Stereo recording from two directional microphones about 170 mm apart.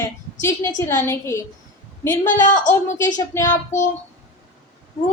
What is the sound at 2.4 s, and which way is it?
Speech, 50° left (ahead or behind).